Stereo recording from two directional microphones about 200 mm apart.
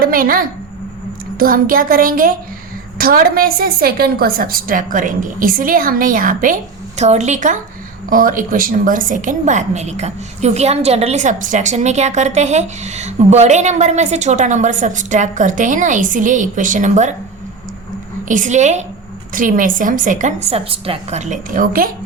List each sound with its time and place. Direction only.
0.0 s a woman's voice: 45° right (ahead or behind)
18.3 s a woman's voice: 40° right (ahead or behind)